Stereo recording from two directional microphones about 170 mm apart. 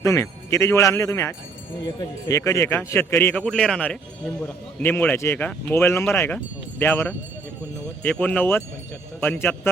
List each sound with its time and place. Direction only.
0.0 s a man's voice: 15° left (ahead or behind)